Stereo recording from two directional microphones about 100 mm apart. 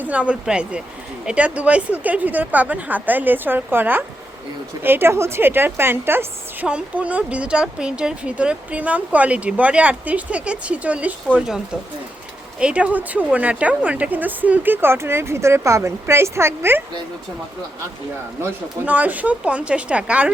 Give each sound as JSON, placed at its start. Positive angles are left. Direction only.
{"t": 0.0, "sound": "speech", "side_deg": -15}
{"t": 6.7, "sound": "speech", "side_deg": -10}
{"t": 18.9, "sound": "speech", "side_deg": -15}